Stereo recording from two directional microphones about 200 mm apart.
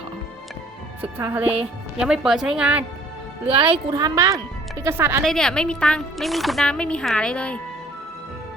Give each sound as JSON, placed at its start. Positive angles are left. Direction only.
{"t": 1.0, "sound": "speech", "side_deg": -10}
{"t": 3.4, "sound": "speech", "side_deg": -25}
{"t": 5.2, "sound": "speech", "side_deg": 5}